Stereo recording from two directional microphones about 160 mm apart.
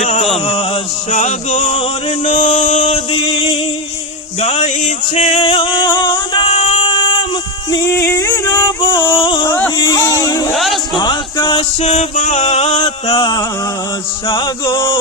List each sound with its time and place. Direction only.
0.0 s a sound: 45° left (ahead or behind)
0.3 s chant: 40° left (ahead or behind)
3.1 s a sound: 35° left (ahead or behind)
4.4 s music: 40° left (ahead or behind)
6.5 s child singing: 40° left (ahead or behind)
7.7 s music: 20° left (ahead or behind)
8.6 s music: 30° left (ahead or behind)
9.5 s a sound: 15° left (ahead or behind)
9.7 s vehicle: 25° left (ahead or behind)
10.5 s music: centre (ahead or behind)
10.9 s music: 30° left (ahead or behind)
11.8 s music: 40° left (ahead or behind)
13.1 s chant: 30° left (ahead or behind)